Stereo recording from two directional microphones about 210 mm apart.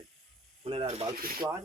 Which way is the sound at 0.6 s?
30° right (ahead or behind).